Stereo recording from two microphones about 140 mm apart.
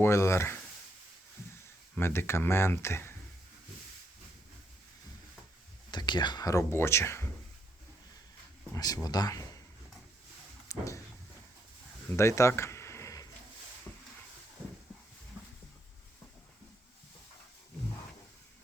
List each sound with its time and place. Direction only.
0.0 s speech: 20° left (ahead or behind)
2.0 s speech: 15° left (ahead or behind)
5.9 s speech: 35° left (ahead or behind)
8.7 s speech: 25° left (ahead or behind)
10.7 s a sound: 20° left (ahead or behind)
12.1 s a sound: 20° left (ahead or behind)